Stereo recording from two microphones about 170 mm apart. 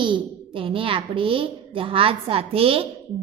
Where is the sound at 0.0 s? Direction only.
30° right (ahead or behind).